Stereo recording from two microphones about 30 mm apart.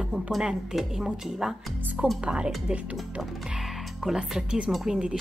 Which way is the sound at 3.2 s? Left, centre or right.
Centre.